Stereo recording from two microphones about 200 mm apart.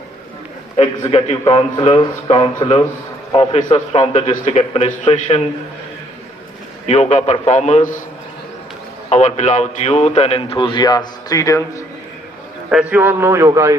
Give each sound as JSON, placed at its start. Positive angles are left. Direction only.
{"t": 0.8, "sound": "a man's voice", "side_deg": 25}
{"t": 6.8, "sound": "a man's voice", "side_deg": 35}
{"t": 9.0, "sound": "a man's voice", "side_deg": 35}
{"t": 12.7, "sound": "a man's voice", "side_deg": -5}